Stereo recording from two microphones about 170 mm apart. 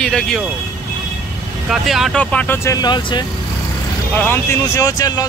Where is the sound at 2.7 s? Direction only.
25° left (ahead or behind).